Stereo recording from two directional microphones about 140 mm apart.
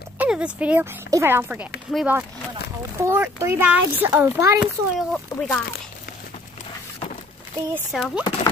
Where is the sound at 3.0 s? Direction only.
20° right (ahead or behind).